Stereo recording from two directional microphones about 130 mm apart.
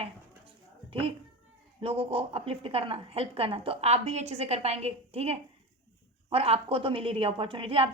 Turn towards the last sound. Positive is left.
turn(degrees=-45)  # may be behind; listen again after turning